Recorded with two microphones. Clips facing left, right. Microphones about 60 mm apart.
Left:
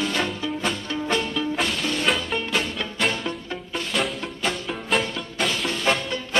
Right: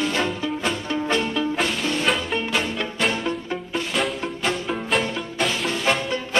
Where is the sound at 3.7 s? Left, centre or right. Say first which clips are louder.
Right 1 dB; centre.